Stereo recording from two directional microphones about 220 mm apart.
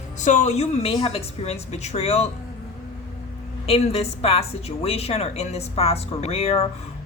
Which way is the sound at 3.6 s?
25° left (ahead or behind).